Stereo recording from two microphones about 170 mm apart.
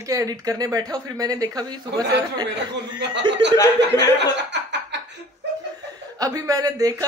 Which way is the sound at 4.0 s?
90° right.